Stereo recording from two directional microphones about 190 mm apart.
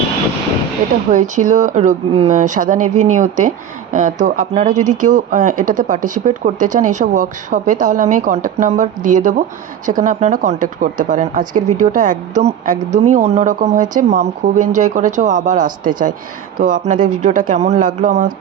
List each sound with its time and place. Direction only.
1.1 s speech: 40° right (ahead or behind)